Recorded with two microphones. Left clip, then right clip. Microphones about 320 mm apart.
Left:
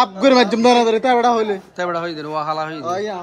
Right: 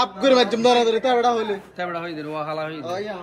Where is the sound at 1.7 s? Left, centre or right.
Centre.